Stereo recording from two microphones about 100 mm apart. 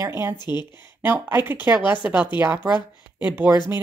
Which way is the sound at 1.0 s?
20° right (ahead or behind).